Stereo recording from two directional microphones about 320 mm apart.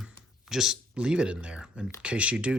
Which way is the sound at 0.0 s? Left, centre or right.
Centre.